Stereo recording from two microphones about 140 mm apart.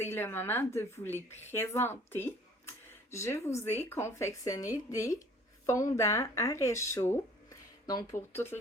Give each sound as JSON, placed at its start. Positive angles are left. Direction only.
{"t": 0.0, "sound": "a woman's voice", "side_deg": 15}